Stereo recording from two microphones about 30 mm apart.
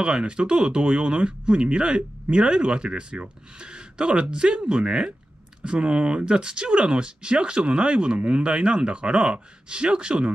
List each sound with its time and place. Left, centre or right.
0.0 s speech: right